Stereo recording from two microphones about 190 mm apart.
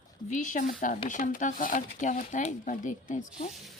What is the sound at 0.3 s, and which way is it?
Speech, 40° left (ahead or behind).